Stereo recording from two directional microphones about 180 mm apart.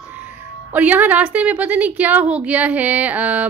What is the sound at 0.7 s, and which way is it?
A woman's voice, 10° right (ahead or behind).